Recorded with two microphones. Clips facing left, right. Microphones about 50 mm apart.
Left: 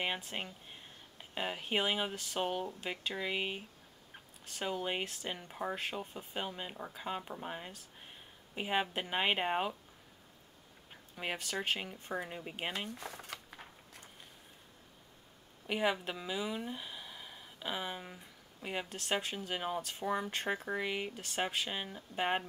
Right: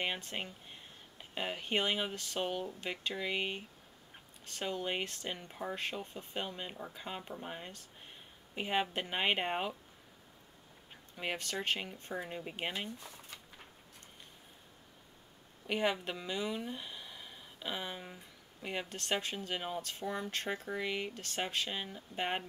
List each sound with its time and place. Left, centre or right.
0.0 s speech: centre
5.8 s speech: centre
11.1 s speech: centre
12.9 s speech: left
15.6 s speech: centre